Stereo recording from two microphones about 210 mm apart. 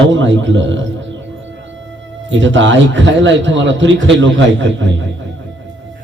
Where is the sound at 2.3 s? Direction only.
60° right (ahead or behind).